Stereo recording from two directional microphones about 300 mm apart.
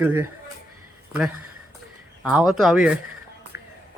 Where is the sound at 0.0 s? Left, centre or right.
Centre.